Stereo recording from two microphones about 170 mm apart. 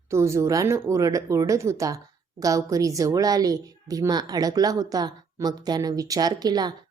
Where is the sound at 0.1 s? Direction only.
15° right (ahead or behind).